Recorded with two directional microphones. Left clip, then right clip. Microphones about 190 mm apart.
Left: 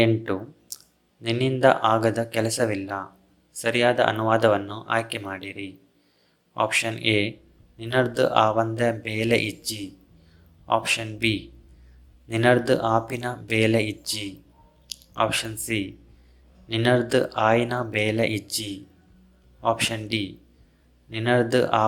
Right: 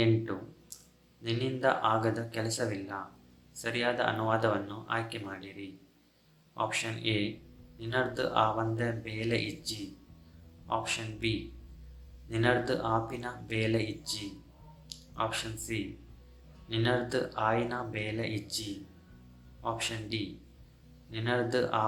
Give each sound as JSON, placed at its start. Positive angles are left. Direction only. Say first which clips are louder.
{"t": 0.0, "sound": "speech", "louder": "left 8 dB", "side_deg": 40}